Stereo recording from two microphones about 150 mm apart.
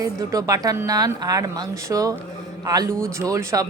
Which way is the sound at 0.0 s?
25° right (ahead or behind).